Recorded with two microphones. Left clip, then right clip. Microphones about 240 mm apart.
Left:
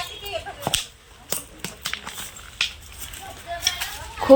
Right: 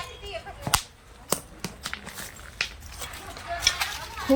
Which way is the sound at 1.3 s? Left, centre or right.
Centre.